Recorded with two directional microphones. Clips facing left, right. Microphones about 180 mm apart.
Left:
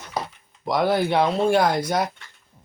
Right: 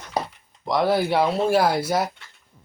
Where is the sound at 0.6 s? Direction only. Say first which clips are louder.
Even; centre (ahead or behind).